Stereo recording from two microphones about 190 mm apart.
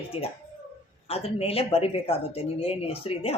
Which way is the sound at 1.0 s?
30° left (ahead or behind).